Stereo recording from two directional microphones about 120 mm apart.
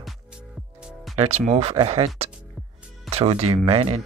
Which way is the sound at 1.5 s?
60° right (ahead or behind).